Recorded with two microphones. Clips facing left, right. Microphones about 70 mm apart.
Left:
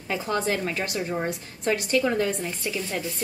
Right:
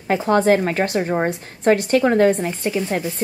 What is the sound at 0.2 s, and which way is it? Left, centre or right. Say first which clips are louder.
A woman's voice: right 11 dB; right.